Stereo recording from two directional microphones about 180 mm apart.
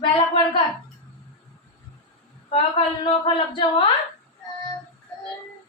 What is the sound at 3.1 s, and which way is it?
Singing, 30° left (ahead or behind).